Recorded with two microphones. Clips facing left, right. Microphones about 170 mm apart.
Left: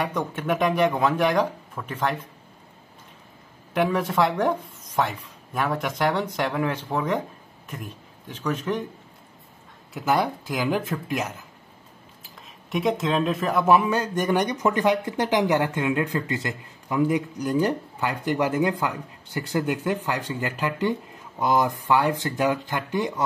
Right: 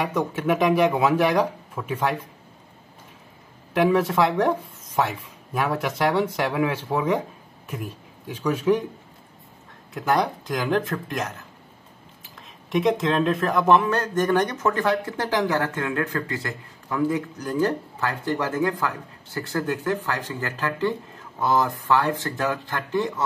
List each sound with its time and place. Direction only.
0.0 s speech: 5° right (ahead or behind)
3.7 s speech: centre (ahead or behind)
9.9 s speech: centre (ahead or behind)
12.7 s speech: centre (ahead or behind)